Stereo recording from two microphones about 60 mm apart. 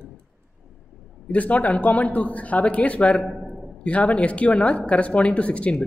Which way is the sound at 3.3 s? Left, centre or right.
Centre.